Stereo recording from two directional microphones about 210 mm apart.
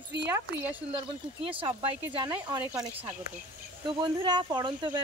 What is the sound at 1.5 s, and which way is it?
Speech, 25° right (ahead or behind).